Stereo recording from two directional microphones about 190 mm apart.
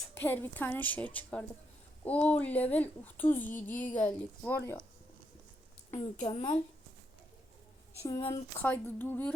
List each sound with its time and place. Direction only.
0.1 s speech: 10° left (ahead or behind)
5.9 s a woman's voice: 35° left (ahead or behind)
8.6 s speech: 10° left (ahead or behind)